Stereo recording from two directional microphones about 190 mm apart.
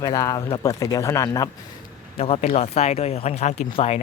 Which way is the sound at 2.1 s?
30° left (ahead or behind).